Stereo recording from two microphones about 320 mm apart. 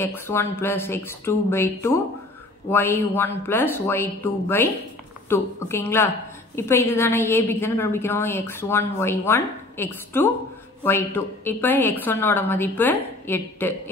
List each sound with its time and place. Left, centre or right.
0.0 s a woman's voice: centre